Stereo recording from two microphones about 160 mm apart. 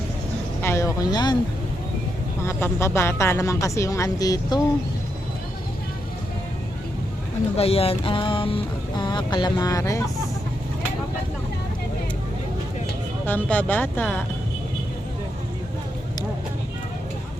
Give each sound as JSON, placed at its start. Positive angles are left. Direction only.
{"t": 0.6, "sound": "speech", "side_deg": 15}
{"t": 2.4, "sound": "speech", "side_deg": 15}
{"t": 7.5, "sound": "speech", "side_deg": 40}
{"t": 13.2, "sound": "speech", "side_deg": 10}